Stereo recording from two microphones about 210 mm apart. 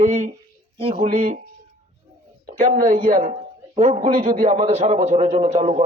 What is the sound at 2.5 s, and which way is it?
A man's voice, 40° right (ahead or behind).